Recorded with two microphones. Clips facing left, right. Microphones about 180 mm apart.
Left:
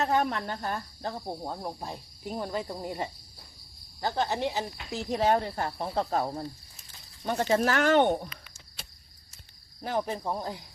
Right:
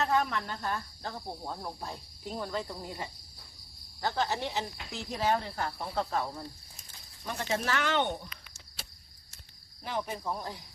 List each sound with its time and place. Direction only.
0.0 s speech: 35° left (ahead or behind)
0.3 s speech: 50° left (ahead or behind)
1.0 s cricket: 15° left (ahead or behind)
4.0 s speech: 25° left (ahead or behind)
4.9 s speech: 40° left (ahead or behind)
5.5 s speech: 25° left (ahead or behind); by 8.3 s 50° left (ahead or behind)
9.8 s speech: 40° left (ahead or behind)